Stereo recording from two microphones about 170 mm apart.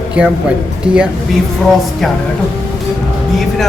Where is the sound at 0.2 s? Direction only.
5° right (ahead or behind).